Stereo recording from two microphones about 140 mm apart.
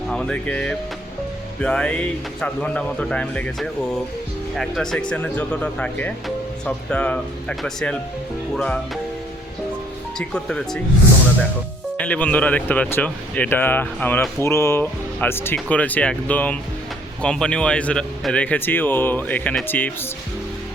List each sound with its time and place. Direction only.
0.1 s speech: 5° left (ahead or behind)
10.2 s speech: 5° left (ahead or behind)
11.9 s speech: 10° left (ahead or behind)